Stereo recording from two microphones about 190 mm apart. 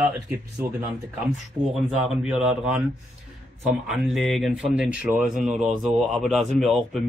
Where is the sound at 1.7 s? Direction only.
Centre (ahead or behind).